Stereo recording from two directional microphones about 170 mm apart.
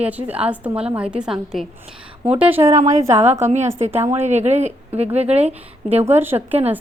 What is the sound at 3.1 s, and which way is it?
Speech, 40° right (ahead or behind).